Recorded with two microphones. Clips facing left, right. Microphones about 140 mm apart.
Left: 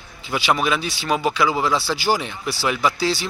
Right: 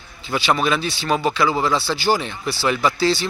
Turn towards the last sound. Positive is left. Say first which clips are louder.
# right 2 dB
turn(degrees=10)  # may be behind; listen again after turning